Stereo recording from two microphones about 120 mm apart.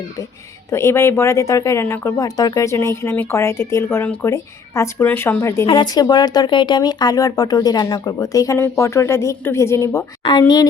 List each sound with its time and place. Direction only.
0.7 s speech: 20° left (ahead or behind)
5.6 s speech: 40° left (ahead or behind); by 10.1 s 25° left (ahead or behind)
10.2 s speech: 35° left (ahead or behind)